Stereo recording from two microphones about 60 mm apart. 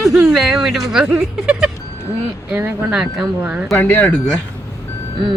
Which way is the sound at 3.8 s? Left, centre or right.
Left.